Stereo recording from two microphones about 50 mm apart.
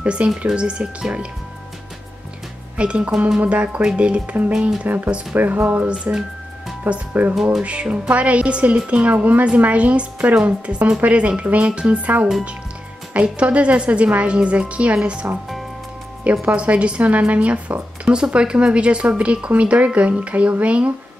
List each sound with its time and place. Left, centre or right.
0.0 s speech: right
2.8 s speech: right
4.8 s speech: right
7.6 s speech: right
16.3 s speech: right
18.0 s speech: centre